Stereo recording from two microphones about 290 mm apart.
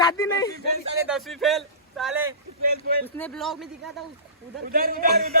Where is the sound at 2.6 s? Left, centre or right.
Right.